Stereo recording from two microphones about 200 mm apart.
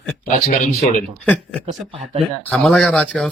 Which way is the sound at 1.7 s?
30° right (ahead or behind).